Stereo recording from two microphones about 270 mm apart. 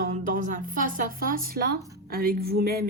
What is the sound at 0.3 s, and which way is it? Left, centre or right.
Speech, right.